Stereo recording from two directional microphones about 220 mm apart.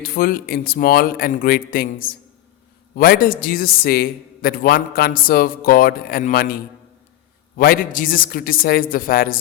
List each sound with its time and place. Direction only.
0.0 s a man's voice: 40° left (ahead or behind)